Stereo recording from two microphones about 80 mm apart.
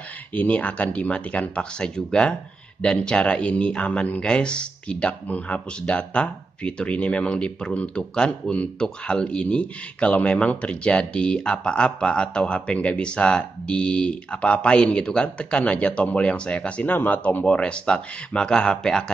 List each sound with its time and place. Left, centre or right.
0.3 s speech: centre